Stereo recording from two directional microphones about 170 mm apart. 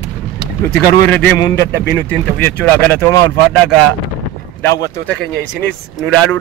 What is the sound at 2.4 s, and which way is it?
Speech, 10° left (ahead or behind).